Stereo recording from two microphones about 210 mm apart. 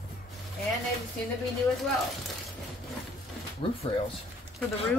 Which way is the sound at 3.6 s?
25° left (ahead or behind).